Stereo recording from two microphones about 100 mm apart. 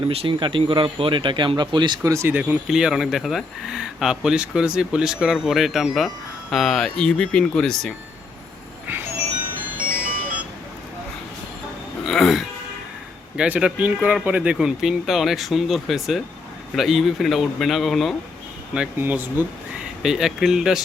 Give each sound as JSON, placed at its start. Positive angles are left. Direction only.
{"t": 0.1, "sound": "speech", "side_deg": -70}
{"t": 2.0, "sound": "speech", "side_deg": -30}
{"t": 2.3, "sound": "speech", "side_deg": -15}
{"t": 2.6, "sound": "speech", "side_deg": -5}
{"t": 12.0, "sound": "speech", "side_deg": 5}
{"t": 18.9, "sound": "speech", "side_deg": -20}
{"t": 20.0, "sound": "speech", "side_deg": -5}